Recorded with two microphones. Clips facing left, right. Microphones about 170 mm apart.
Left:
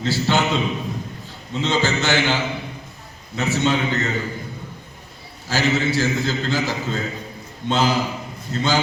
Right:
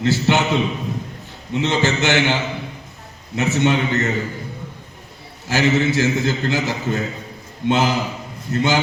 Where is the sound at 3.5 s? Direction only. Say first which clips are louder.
Right 2 dB; 15° right (ahead or behind).